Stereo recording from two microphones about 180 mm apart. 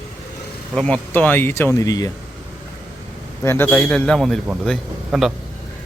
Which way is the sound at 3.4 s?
10° left (ahead or behind).